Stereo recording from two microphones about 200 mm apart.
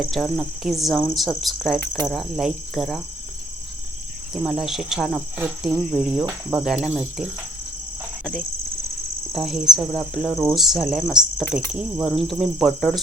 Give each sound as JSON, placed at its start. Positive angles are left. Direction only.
{"t": 0.1, "sound": "speech", "side_deg": 0}
{"t": 4.4, "sound": "speech", "side_deg": 0}
{"t": 9.3, "sound": "speech", "side_deg": 0}